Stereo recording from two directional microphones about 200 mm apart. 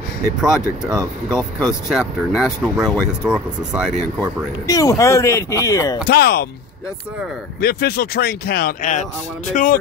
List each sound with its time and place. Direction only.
0.9 s speech: 5° right (ahead or behind)
4.6 s speech: 15° left (ahead or behind)
6.0 s speech: 50° left (ahead or behind)
7.6 s speech: 50° left (ahead or behind)